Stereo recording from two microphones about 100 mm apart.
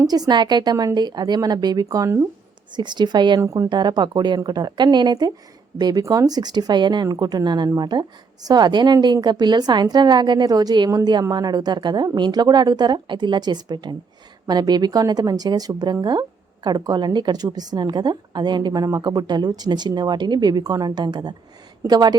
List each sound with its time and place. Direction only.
0.1 s speech: 45° right (ahead or behind)
2.7 s speech: 50° right (ahead or behind)
3.4 s speech: 30° right (ahead or behind)
3.7 s speech: 45° right (ahead or behind)